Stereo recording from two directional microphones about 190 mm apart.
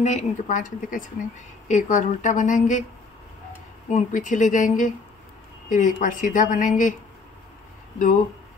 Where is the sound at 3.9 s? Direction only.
40° left (ahead or behind).